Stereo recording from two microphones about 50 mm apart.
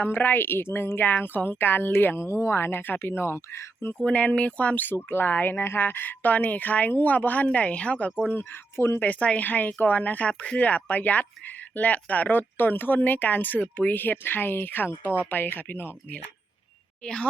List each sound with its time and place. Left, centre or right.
0.0 s a woman's voice: left
2.1 s speech: left
2.6 s a woman's voice: left
4.0 s speech: left
8.7 s speech: left
9.0 s speech: left